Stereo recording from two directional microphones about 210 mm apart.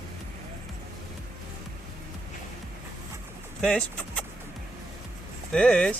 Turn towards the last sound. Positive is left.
turn(degrees=5)  # may be behind; listen again after turning